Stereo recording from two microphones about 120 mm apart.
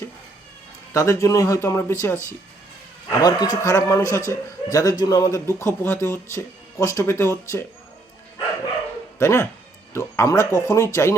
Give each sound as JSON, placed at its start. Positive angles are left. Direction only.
{"t": 0.9, "sound": "a man's voice", "side_deg": 25}
{"t": 3.1, "sound": "a man's voice", "side_deg": 35}
{"t": 9.1, "sound": "a man's voice", "side_deg": 20}